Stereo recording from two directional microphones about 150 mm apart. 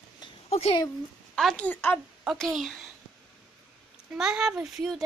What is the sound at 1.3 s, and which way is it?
Speech, 5° left (ahead or behind).